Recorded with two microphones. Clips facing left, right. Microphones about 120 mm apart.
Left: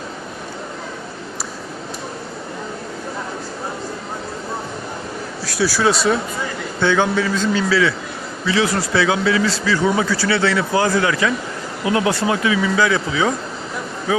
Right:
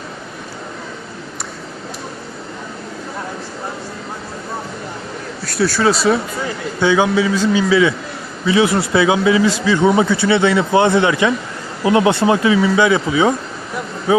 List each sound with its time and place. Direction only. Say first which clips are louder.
5.5 s speech: right 2 dB; centre (ahead or behind)
6.7 s a man's voice: right 3 dB; 10° right (ahead or behind); by 12.5 s 30° right (ahead or behind)
12.7 s a man's voice: right 4 dB; 20° right (ahead or behind)